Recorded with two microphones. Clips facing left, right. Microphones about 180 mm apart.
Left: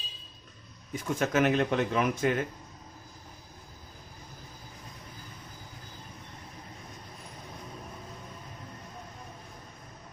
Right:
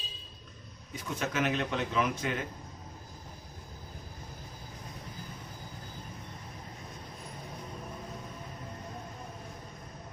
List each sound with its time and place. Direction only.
0.9 s a man's voice: 50° left (ahead or behind)